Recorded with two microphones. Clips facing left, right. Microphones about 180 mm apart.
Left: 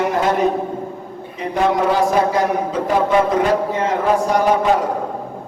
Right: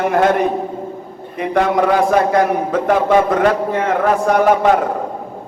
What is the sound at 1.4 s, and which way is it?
A man's voice, 55° right (ahead or behind).